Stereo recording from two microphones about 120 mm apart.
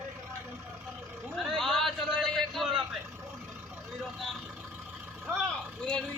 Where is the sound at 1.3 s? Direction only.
Centre (ahead or behind).